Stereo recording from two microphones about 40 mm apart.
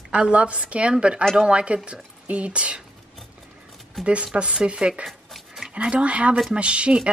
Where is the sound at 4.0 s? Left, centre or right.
Centre.